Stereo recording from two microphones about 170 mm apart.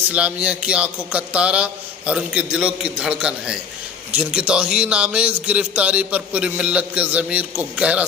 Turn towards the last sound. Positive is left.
turn(degrees=-5)  # may be behind; listen again after turning